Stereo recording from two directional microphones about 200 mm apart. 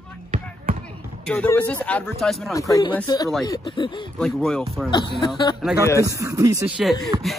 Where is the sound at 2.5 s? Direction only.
15° left (ahead or behind).